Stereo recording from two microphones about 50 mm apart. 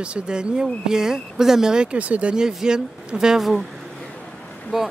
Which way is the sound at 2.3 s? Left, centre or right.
Centre.